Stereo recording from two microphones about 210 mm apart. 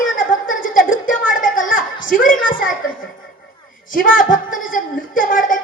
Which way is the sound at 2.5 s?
40° left (ahead or behind).